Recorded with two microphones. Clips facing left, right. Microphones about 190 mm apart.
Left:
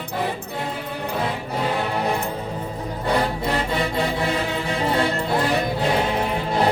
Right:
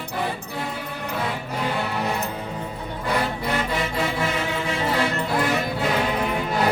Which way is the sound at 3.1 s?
35° left (ahead or behind).